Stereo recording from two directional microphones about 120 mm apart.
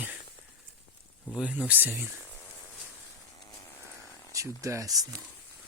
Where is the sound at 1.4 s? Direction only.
10° right (ahead or behind).